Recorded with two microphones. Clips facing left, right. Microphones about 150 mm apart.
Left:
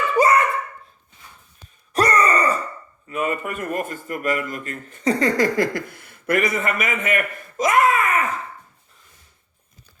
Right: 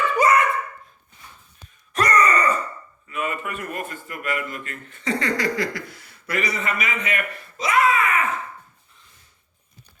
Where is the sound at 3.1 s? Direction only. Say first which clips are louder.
Left 4 dB; 40° left (ahead or behind).